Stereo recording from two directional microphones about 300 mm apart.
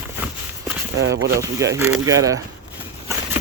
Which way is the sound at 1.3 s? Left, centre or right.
Centre.